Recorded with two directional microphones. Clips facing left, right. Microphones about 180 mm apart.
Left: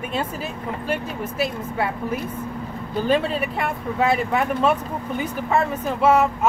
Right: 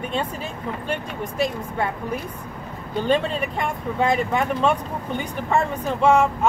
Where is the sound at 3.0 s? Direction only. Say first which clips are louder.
Left 1 dB; 5° left (ahead or behind).